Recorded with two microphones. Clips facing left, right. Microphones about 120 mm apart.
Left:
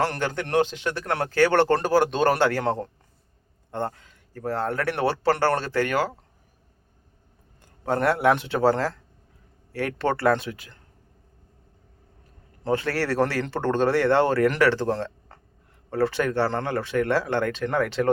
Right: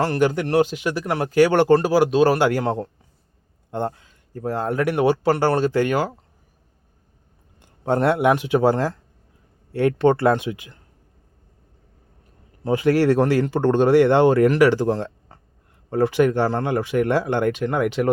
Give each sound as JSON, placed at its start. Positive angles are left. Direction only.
{"t": 0.0, "sound": "speech", "side_deg": -10}
{"t": 7.9, "sound": "speech", "side_deg": -20}
{"t": 12.6, "sound": "speech", "side_deg": -15}